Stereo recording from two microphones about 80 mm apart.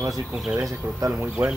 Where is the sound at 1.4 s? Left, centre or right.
Right.